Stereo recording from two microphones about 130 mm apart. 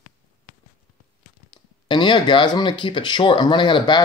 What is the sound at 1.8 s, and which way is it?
Speech, 40° left (ahead or behind).